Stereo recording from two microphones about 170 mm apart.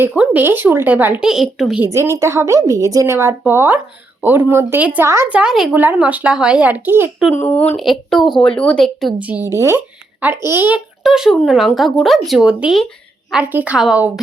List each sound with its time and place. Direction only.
0.0 s speech: 10° right (ahead or behind)
1.8 s speech: 15° right (ahead or behind)
7.4 s speech: 10° left (ahead or behind)